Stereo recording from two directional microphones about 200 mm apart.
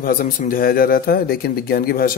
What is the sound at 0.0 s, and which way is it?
Speech, 45° left (ahead or behind).